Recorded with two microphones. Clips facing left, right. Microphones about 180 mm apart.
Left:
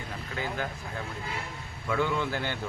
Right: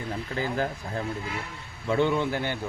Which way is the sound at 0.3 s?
35° right (ahead or behind).